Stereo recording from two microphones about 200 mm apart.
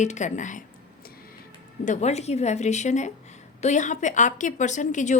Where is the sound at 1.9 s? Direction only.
35° left (ahead or behind).